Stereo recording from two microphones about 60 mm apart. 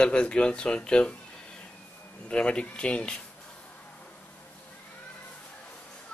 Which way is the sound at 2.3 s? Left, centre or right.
Centre.